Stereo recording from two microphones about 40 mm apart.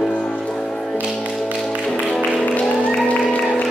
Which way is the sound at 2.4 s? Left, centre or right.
Left.